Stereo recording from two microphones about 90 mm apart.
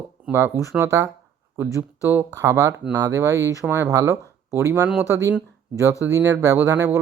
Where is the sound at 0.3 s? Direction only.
25° right (ahead or behind).